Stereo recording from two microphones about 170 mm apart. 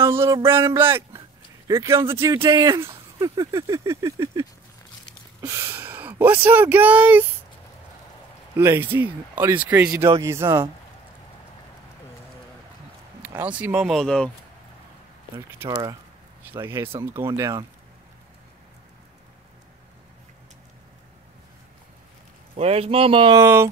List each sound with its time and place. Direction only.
0.0 s speech: 15° right (ahead or behind)
8.5 s speech: 15° right (ahead or behind)
13.2 s speech: 10° right (ahead or behind); by 14.3 s 5° left (ahead or behind)
15.6 s speech: 15° right (ahead or behind)
22.6 s speech: 35° right (ahead or behind)
23.4 s speech: 15° right (ahead or behind)